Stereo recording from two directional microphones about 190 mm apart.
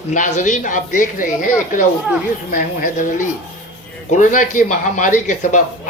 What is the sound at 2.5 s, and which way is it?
Speech, 45° left (ahead or behind).